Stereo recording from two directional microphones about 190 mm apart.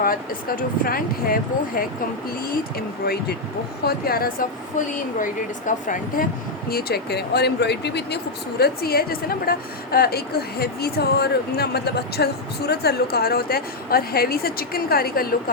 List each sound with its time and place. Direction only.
0.0 s speech: 50° left (ahead or behind)